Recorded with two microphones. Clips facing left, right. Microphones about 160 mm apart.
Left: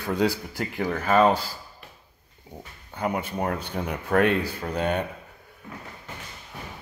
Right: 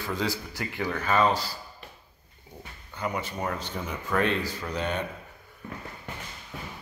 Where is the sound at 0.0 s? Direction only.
60° left (ahead or behind).